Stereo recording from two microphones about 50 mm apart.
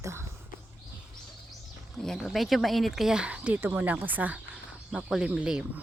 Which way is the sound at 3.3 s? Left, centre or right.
Right.